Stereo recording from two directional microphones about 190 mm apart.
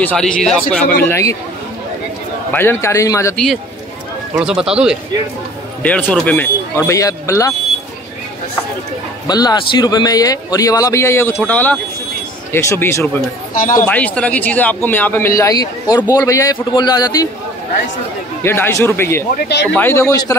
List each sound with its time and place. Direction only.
0.0 s speech: 5° left (ahead or behind)
2.5 s speech: 10° left (ahead or behind)
4.4 s speech: 5° right (ahead or behind)
5.8 s speech: 10° left (ahead or behind)
9.3 s a man's voice: 20° left (ahead or behind)
13.6 s speech: 45° left (ahead or behind)
13.8 s a man's voice: 5° left (ahead or behind)
18.4 s speech: 10° left (ahead or behind)
19.3 s speech: 60° left (ahead or behind)
19.7 s speech: 10° left (ahead or behind)